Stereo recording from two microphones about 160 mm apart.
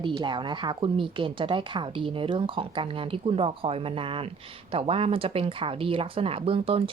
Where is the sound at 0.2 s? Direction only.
30° right (ahead or behind).